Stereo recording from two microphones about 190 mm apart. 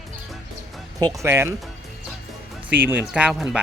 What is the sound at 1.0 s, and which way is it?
Speech, 15° right (ahead or behind).